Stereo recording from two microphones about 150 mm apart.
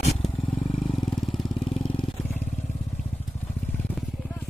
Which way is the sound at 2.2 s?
10° left (ahead or behind).